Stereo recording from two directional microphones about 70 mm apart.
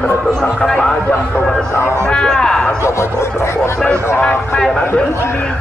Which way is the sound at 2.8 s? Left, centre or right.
Left.